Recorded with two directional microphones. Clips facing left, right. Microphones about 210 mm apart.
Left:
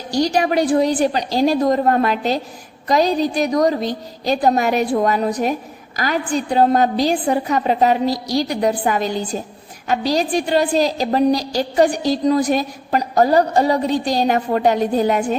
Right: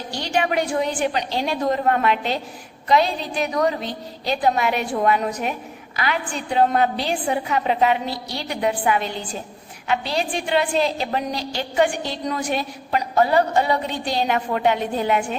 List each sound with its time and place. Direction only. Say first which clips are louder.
0.1 s a woman's voice: left 6 dB; 40° left (ahead or behind)